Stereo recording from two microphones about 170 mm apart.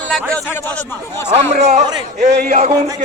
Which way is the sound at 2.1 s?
50° right (ahead or behind).